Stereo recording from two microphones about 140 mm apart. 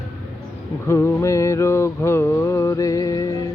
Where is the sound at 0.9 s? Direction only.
20° left (ahead or behind).